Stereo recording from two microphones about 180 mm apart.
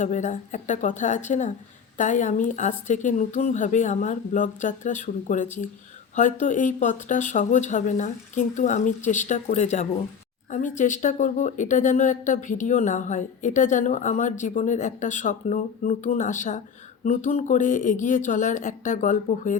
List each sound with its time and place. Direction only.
0.0 s speech: 45° left (ahead or behind)